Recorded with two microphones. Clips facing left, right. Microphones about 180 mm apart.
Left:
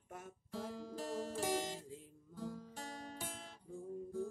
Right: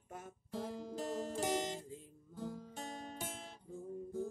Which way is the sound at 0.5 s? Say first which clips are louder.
Right 2 dB; 20° right (ahead or behind).